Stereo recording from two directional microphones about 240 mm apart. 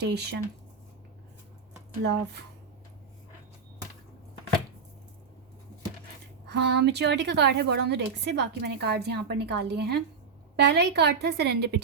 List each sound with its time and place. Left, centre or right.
0.0 s a woman's voice: right
1.9 s a woman's voice: right
6.5 s a woman's voice: right